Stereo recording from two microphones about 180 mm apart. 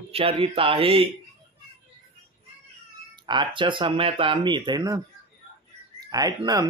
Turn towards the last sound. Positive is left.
turn(degrees=-20)  # may be behind; listen again after turning